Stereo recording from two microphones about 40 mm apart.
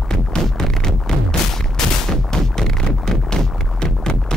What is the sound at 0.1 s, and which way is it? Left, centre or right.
Music, centre.